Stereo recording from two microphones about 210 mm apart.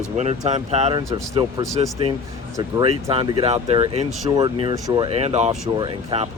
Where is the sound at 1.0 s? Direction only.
15° right (ahead or behind); by 5.5 s 30° right (ahead or behind).